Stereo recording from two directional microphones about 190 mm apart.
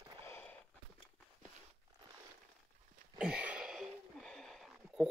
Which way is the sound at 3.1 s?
5° right (ahead or behind).